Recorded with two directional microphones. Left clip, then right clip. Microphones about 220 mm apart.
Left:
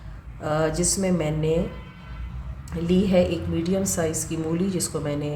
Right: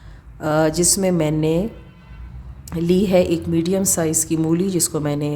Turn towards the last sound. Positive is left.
turn(degrees=-50)  # may be behind; listen again after turning